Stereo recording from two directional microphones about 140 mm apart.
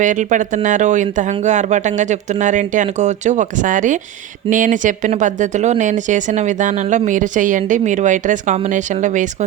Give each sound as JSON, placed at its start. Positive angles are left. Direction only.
{"t": 0.0, "sound": "speech", "side_deg": -65}